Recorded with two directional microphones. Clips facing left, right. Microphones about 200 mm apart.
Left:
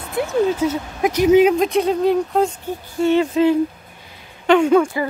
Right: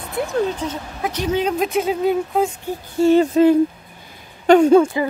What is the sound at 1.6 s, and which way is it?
Speech, 5° right (ahead or behind).